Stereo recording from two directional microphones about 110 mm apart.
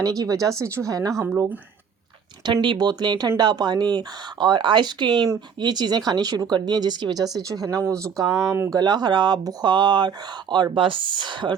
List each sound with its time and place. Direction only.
0.0 s speech: 35° right (ahead or behind)
2.5 s speech: 45° right (ahead or behind); by 8.7 s 25° right (ahead or behind)
8.7 s speech: 40° right (ahead or behind)